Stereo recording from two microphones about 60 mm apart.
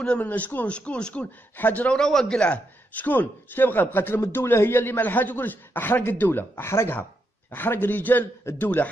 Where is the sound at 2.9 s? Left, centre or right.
Left.